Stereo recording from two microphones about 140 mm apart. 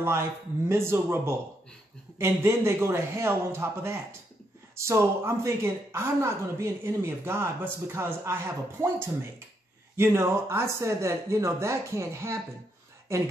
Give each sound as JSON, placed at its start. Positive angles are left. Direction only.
{"t": 0.0, "sound": "a woman's voice", "side_deg": -20}